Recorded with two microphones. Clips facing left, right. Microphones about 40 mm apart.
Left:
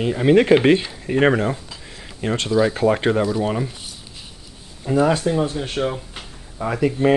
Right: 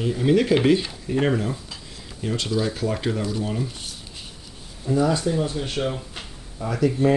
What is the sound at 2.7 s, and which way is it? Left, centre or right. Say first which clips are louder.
Speech: left 8 dB; left.